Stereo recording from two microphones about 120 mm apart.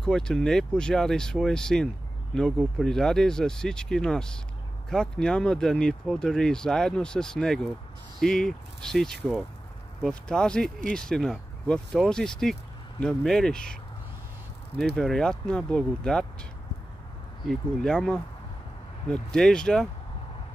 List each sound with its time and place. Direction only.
0.0 s speech: 5° left (ahead or behind)
14.8 s speech: 5° left (ahead or behind)
17.5 s speech: 5° left (ahead or behind)